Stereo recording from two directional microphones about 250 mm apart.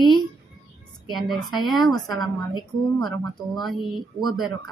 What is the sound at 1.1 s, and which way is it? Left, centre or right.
Speech, centre.